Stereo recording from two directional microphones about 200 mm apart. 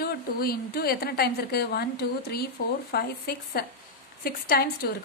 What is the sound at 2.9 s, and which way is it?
A woman's voice, 50° left (ahead or behind).